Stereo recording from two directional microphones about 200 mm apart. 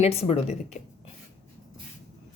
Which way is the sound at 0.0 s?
30° left (ahead or behind).